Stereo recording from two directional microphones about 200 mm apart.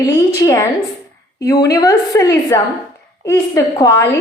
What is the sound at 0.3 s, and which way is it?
A woman's voice, 15° left (ahead or behind).